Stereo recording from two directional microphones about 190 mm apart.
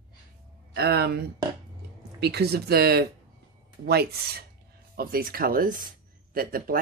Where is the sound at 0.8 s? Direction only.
60° right (ahead or behind).